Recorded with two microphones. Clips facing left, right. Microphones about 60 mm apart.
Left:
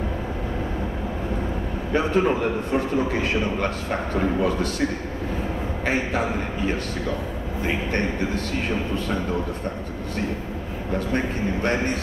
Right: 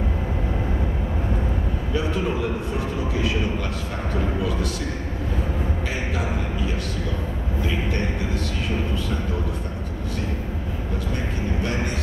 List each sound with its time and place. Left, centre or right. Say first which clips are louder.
1.9 s a sound: left 5 dB; left
3.2 s a man's voice: left 1 dB; left
5.9 s a man's voice: left 4 dB; left